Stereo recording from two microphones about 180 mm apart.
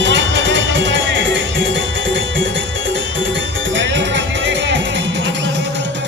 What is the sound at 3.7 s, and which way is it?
Music, 90° right.